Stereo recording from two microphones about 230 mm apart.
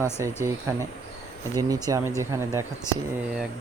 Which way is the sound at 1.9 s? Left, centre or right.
Centre.